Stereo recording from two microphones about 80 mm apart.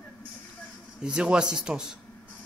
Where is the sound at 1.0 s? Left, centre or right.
Centre.